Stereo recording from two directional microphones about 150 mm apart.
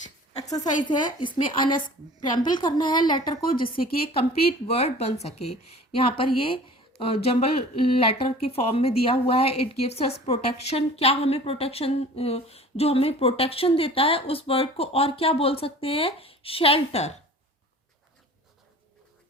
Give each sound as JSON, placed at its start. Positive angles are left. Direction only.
{"t": 0.0, "sound": "a sound", "side_deg": 50}
{"t": 0.9, "sound": "a woman's voice", "side_deg": 30}
{"t": 4.4, "sound": "speech", "side_deg": 40}